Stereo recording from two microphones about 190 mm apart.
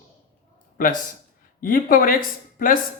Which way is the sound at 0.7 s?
45° left (ahead or behind).